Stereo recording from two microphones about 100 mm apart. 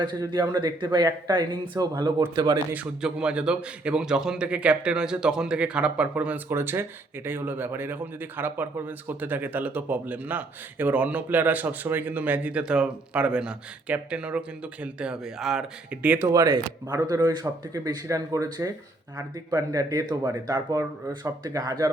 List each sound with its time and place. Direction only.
0.3 s speech: 50° right (ahead or behind)
2.7 s speech: 10° right (ahead or behind)
16.3 s speech: 35° right (ahead or behind)